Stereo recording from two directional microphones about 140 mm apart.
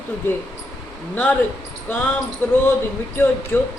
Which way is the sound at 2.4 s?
10° left (ahead or behind).